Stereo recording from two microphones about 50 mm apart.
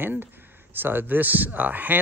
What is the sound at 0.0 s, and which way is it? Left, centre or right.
Speech, right.